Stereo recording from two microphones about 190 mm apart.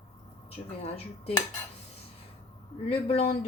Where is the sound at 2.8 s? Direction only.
30° left (ahead or behind).